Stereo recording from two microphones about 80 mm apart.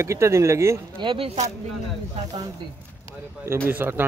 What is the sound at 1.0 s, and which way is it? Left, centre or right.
Speech, right.